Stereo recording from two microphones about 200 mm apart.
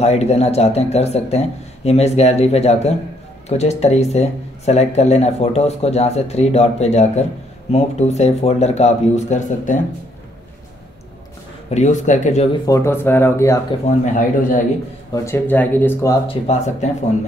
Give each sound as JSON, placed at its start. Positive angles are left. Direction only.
{"t": 0.0, "sound": "speech", "side_deg": 30}
{"t": 11.7, "sound": "speech", "side_deg": 35}
{"t": 12.6, "sound": "speech", "side_deg": 15}
{"t": 13.8, "sound": "speech", "side_deg": 40}
{"t": 15.2, "sound": "speech", "side_deg": 10}
{"t": 16.4, "sound": "speech", "side_deg": 35}